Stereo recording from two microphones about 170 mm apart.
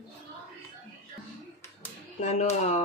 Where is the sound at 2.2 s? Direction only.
40° left (ahead or behind).